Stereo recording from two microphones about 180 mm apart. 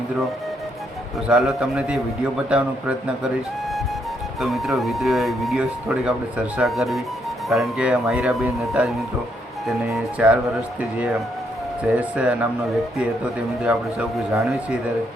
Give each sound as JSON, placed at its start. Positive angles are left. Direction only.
{"t": 1.3, "sound": "speech", "side_deg": 0}
{"t": 4.4, "sound": "speech", "side_deg": 0}
{"t": 11.8, "sound": "speech", "side_deg": -5}
{"t": 13.7, "sound": "speech", "side_deg": -5}